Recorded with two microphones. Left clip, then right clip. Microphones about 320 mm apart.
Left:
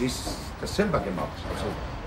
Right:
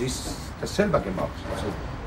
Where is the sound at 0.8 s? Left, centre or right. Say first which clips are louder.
Right 2 dB; centre.